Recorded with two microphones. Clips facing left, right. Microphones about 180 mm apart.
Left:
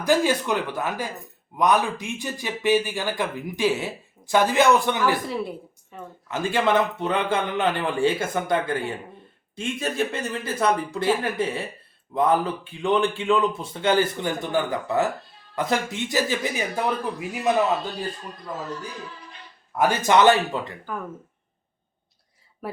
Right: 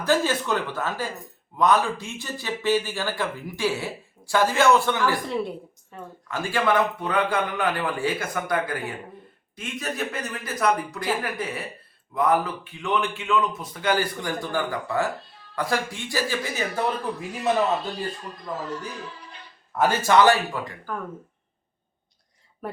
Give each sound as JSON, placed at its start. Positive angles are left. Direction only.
{"t": 0.0, "sound": "speech", "side_deg": 15}
{"t": 5.2, "sound": "a woman's voice", "side_deg": 0}
{"t": 6.2, "sound": "speech", "side_deg": 20}
{"t": 19.7, "sound": "speech", "side_deg": 20}
{"t": 20.9, "sound": "speech", "side_deg": 5}